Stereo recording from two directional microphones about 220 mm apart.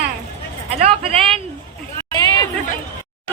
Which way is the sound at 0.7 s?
25° right (ahead or behind).